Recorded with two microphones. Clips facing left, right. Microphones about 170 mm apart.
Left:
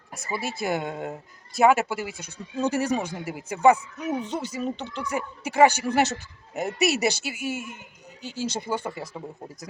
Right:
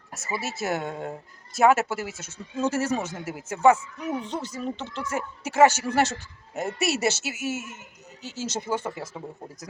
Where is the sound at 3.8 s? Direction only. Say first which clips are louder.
Left 2 dB; 20° left (ahead or behind).